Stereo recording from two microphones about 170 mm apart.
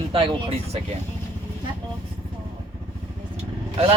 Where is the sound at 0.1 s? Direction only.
30° right (ahead or behind).